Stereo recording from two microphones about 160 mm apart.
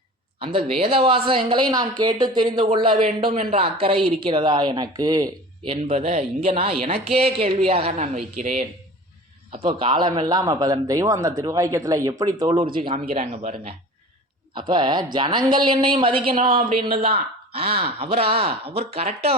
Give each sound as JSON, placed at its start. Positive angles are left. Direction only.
{"t": 0.3, "sound": "a woman's voice", "side_deg": -35}
{"t": 5.7, "sound": "a woman's voice", "side_deg": -40}
{"t": 12.5, "sound": "a woman's voice", "side_deg": -35}
{"t": 14.5, "sound": "a man's voice", "side_deg": -30}